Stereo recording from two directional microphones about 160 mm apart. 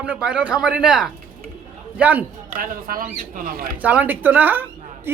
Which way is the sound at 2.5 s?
60° right (ahead or behind).